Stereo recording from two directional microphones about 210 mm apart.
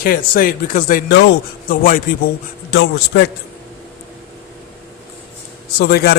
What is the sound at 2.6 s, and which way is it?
Speech, 55° left (ahead or behind).